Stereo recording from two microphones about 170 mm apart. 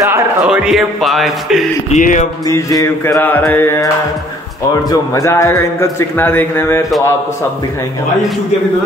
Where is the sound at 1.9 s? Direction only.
45° left (ahead or behind).